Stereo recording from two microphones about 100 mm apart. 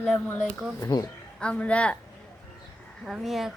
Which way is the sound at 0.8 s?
40° left (ahead or behind).